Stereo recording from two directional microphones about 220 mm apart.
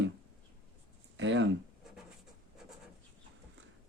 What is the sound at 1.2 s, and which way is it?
Speech, 55° right (ahead or behind).